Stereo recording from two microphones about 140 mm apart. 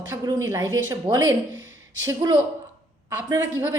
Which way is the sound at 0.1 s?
25° right (ahead or behind).